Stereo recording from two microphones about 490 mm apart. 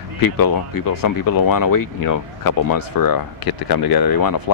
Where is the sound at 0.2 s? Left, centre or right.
Left.